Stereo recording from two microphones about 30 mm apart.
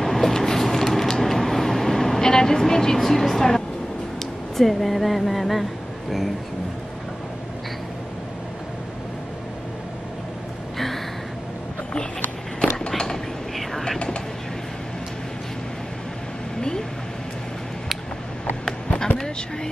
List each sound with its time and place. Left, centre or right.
0.0 s vehicle: centre
2.7 s speech: centre
12.5 s run: left